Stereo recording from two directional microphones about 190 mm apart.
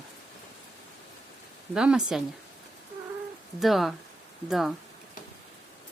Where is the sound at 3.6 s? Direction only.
Centre (ahead or behind).